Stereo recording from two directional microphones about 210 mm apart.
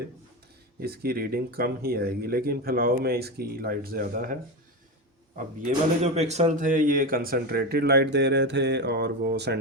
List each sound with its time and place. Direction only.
0.8 s speech: 45° right (ahead or behind)
5.6 s speech: 30° right (ahead or behind); by 9.6 s 50° right (ahead or behind)